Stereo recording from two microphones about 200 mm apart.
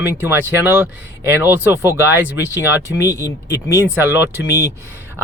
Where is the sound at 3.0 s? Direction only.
15° left (ahead or behind).